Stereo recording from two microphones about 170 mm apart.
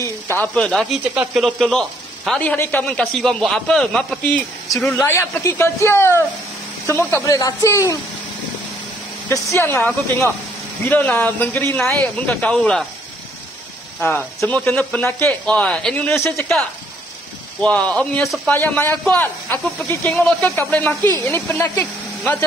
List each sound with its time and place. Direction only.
0.4 s speech: 5° left (ahead or behind)
1.1 s speech: 5° right (ahead or behind)
5.0 s speech: 15° left (ahead or behind)
9.3 s speech: 15° left (ahead or behind)
14.0 s speech: 15° left (ahead or behind)
16.2 s speech: 15° left (ahead or behind)
17.6 s speech: 5° left (ahead or behind)